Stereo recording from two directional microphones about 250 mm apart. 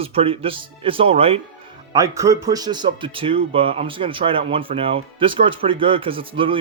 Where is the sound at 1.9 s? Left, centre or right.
Centre.